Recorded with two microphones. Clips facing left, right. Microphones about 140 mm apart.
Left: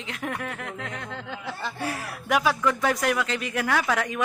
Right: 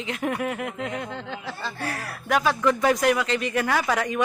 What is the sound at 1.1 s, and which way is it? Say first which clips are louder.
Speech: right 1 dB; 10° left (ahead or behind).